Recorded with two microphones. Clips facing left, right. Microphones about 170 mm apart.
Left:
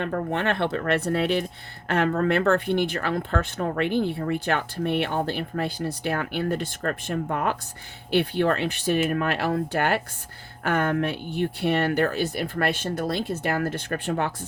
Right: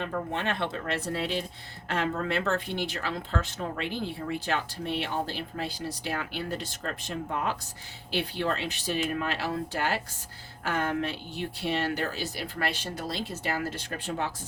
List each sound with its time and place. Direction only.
0.0 s speech: 60° left (ahead or behind)